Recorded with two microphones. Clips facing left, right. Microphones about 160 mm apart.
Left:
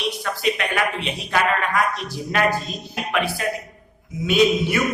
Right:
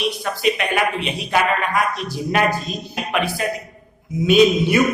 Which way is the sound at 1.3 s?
15° right (ahead or behind).